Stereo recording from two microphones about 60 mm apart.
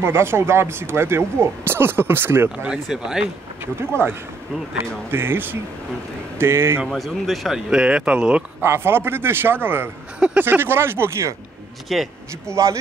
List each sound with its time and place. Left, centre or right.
0.0 s speech: right
2.7 s speech: centre
5.1 s a man's voice: right
6.9 s speech: centre
8.5 s a man's voice: right
11.9 s speech: centre
12.4 s a man's voice: right